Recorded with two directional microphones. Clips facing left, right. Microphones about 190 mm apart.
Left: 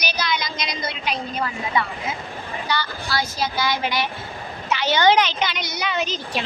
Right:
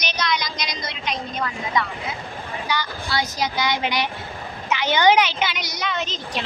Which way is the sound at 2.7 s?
10° right (ahead or behind).